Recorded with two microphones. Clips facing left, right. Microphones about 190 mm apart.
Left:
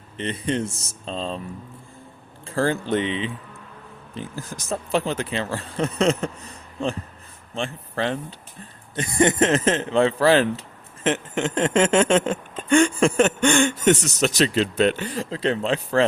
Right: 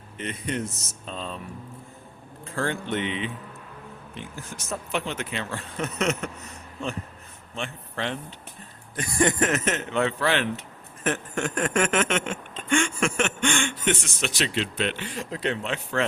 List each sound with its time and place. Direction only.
0.2 s speech: 30° left (ahead or behind)
2.5 s speech: 35° left (ahead or behind)
9.0 s speech: 20° left (ahead or behind)